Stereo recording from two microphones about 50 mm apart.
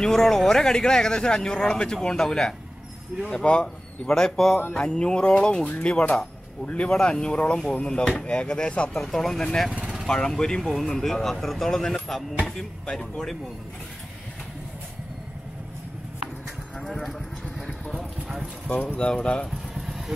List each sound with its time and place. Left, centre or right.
0.0 s speech: centre
8.9 s speech: centre
9.7 s vehicle: centre
10.0 s speech: centre
18.7 s speech: left
18.9 s speech: left
19.4 s vehicle: centre